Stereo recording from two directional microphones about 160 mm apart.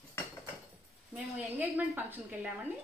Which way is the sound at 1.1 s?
5° right (ahead or behind).